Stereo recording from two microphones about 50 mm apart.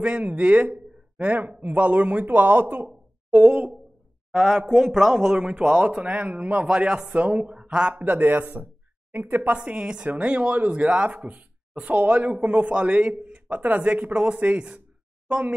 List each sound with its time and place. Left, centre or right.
0.0 s speech: right
4.3 s speech: centre
5.9 s speech: right
7.9 s speech: right
9.6 s speech: centre